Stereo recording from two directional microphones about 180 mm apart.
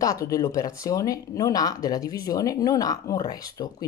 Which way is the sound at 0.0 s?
20° left (ahead or behind).